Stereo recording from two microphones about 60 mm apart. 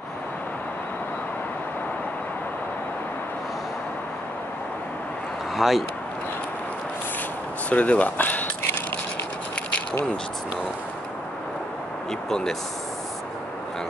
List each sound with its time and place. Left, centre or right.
5.6 s speech: centre
7.7 s speech: left
12.3 s speech: centre